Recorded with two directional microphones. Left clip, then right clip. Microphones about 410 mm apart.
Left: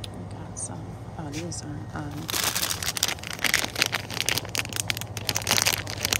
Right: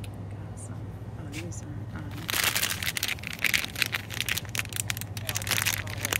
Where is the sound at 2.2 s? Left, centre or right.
Centre.